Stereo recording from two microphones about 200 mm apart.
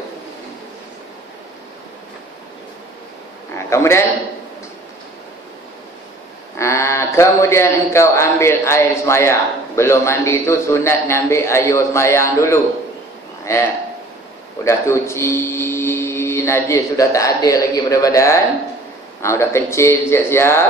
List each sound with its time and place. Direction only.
3.5 s a man's voice: 15° left (ahead or behind)
6.6 s a man's voice: 15° left (ahead or behind)